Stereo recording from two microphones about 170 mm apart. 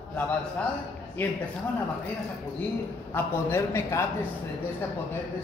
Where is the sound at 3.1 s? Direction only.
15° left (ahead or behind).